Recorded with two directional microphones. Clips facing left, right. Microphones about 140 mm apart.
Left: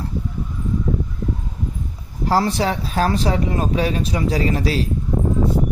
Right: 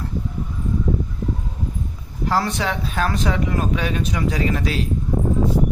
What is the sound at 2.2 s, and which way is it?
A man's voice, 35° left (ahead or behind).